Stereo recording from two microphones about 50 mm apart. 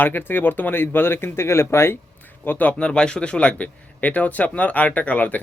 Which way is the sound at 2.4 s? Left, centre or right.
Left.